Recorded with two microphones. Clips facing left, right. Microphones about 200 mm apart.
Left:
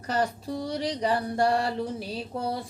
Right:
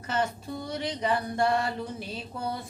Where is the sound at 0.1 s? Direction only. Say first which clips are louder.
Left 2 dB; 35° left (ahead or behind).